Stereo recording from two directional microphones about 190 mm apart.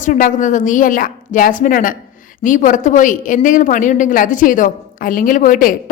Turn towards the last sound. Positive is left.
turn(degrees=45)  # may be behind; listen again after turning